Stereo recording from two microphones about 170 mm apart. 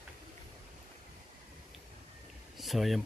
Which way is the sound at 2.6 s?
Centre (ahead or behind).